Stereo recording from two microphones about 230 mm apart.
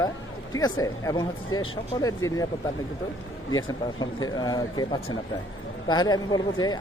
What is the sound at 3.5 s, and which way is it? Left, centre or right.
Speech, centre.